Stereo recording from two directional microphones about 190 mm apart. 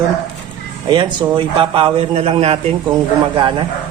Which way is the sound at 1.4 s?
30° right (ahead or behind).